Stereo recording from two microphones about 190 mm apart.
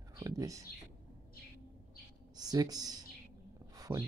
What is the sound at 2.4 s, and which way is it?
Speech, 20° right (ahead or behind).